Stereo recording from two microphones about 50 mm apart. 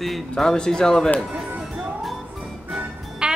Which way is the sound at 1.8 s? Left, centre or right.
Centre.